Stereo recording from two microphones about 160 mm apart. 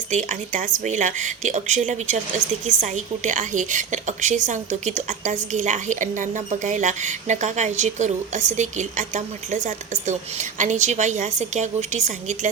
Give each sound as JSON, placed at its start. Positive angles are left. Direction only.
{"t": 0.1, "sound": "a woman's voice", "side_deg": -50}